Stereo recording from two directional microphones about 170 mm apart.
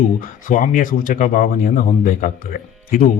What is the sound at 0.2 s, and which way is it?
Speech, 50° left (ahead or behind).